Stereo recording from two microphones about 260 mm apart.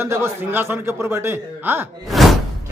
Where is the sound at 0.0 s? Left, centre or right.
Centre.